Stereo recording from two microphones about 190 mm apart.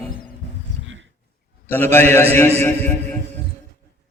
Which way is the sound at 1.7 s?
10° left (ahead or behind).